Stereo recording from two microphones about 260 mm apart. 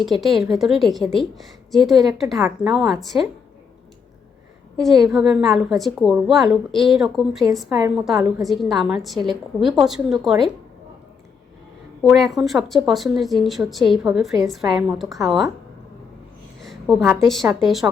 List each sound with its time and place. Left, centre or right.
0.0 s speech: centre
4.8 s speech: centre
7.7 s a woman's voice: centre
7.9 s speech: centre
12.0 s speech: centre
16.6 s speech: centre